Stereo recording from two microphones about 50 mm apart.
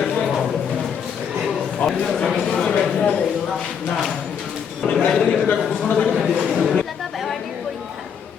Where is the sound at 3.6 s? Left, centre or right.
Centre.